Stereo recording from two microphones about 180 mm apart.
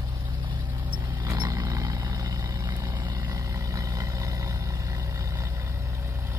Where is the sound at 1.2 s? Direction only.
20° right (ahead or behind).